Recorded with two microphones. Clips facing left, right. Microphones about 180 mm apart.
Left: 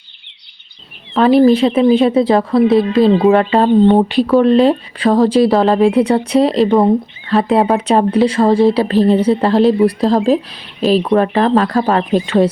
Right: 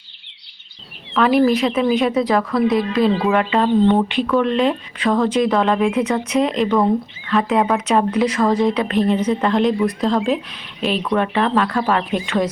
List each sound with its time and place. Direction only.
1.1 s a woman's voice: 30° left (ahead or behind)